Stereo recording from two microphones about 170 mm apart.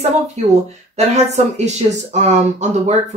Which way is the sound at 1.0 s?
40° right (ahead or behind).